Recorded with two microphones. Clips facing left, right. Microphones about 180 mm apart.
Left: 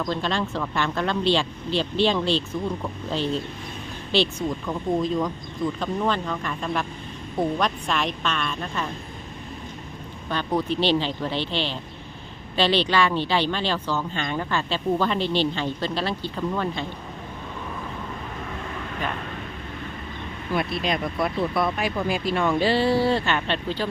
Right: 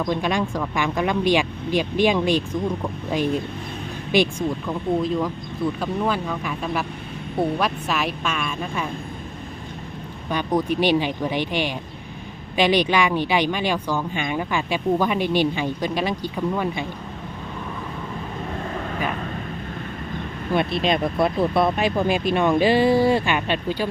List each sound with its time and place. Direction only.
0.0 s speech: 15° right (ahead or behind)
4.6 s speech: 5° right (ahead or behind)
10.2 s speech: 15° right (ahead or behind)
20.5 s speech: 25° right (ahead or behind)